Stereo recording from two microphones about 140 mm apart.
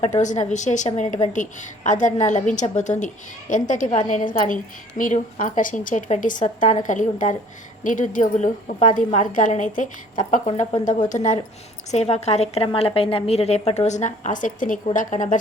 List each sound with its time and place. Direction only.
0.0 s a woman's voice: 55° left (ahead or behind)